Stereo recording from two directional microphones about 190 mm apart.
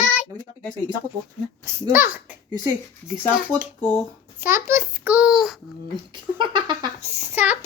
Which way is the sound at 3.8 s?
5° left (ahead or behind).